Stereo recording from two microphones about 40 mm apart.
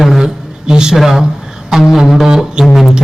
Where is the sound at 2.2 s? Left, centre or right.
Centre.